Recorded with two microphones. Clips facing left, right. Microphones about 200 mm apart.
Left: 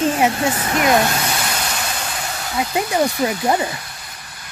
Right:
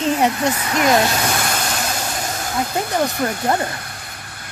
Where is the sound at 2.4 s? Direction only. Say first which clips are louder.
Left 2 dB; 50° right (ahead or behind).